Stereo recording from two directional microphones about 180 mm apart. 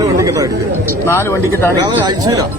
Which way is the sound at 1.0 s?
15° left (ahead or behind).